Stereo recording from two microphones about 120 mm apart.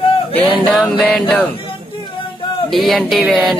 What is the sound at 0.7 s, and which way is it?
Speech, centre (ahead or behind).